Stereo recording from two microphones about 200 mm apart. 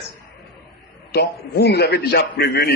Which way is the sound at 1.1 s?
55° left (ahead or behind).